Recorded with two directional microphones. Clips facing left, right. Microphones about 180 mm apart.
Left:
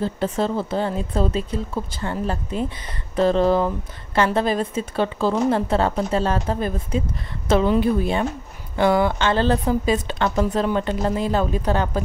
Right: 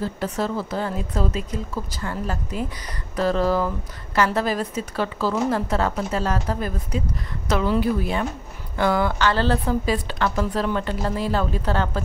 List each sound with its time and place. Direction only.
0.0 s a woman's voice: 25° left (ahead or behind)